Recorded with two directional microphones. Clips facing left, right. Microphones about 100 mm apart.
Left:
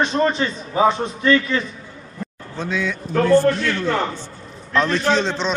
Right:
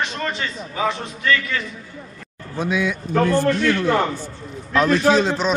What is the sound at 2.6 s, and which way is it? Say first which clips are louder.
Speech: right 2 dB; 10° right (ahead or behind).